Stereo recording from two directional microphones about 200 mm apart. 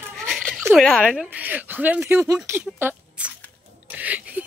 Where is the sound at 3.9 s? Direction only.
5° right (ahead or behind).